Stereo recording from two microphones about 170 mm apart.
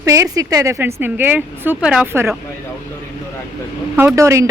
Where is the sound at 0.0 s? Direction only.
20° right (ahead or behind).